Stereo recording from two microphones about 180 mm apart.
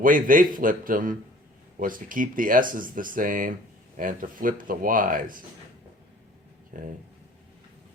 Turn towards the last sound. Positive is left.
turn(degrees=-45)  # may be behind; listen again after turning